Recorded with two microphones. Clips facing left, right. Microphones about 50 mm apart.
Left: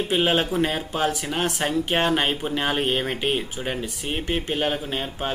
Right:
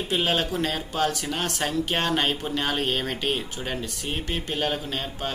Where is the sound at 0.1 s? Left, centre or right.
Centre.